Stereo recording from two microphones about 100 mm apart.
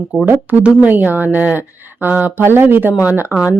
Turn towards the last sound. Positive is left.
turn(degrees=-20)  # may be behind; listen again after turning